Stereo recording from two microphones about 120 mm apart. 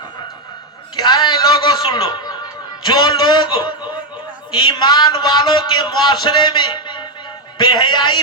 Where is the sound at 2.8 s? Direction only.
40° left (ahead or behind).